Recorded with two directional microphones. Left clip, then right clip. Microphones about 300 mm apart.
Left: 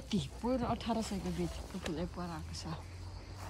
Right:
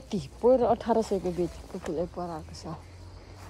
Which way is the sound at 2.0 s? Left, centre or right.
Centre.